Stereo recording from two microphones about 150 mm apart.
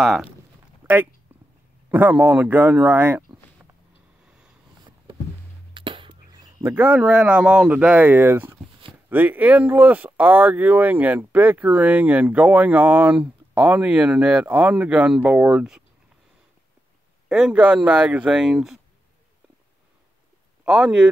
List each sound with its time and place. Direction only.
0.0 s speech: centre (ahead or behind)
0.8 s a sound: 15° right (ahead or behind)
1.3 s dog: 10° right (ahead or behind)
1.9 s speech: 10° right (ahead or behind)
5.8 s music: 35° right (ahead or behind)
6.6 s speech: 15° right (ahead or behind)
17.3 s speech: 5° right (ahead or behind)
20.6 s speech: 5° right (ahead or behind)